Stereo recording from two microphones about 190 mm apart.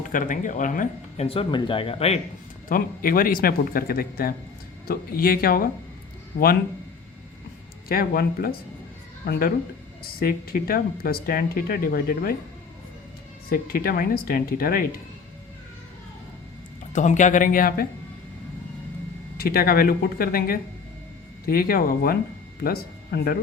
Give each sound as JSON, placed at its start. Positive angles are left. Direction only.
{"t": 0.1, "sound": "speech", "side_deg": 45}
{"t": 2.6, "sound": "speech", "side_deg": 50}
{"t": 7.9, "sound": "speech", "side_deg": 50}
{"t": 13.5, "sound": "speech", "side_deg": 50}
{"t": 16.9, "sound": "speech", "side_deg": 40}
{"t": 19.4, "sound": "speech", "side_deg": 50}